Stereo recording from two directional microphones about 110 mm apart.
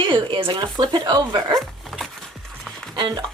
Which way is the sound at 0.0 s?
50° right (ahead or behind).